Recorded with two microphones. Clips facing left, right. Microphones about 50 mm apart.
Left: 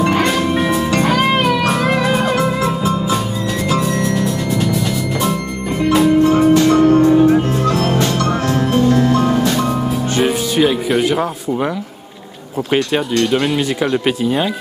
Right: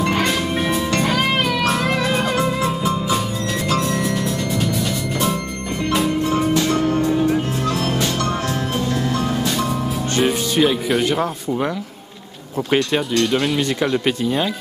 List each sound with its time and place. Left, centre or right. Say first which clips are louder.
0.0 s music: left 4 dB; centre
6.5 s music: left 8 dB; left
10.1 s music: left 1 dB; centre
12.7 s speech: left 2 dB; centre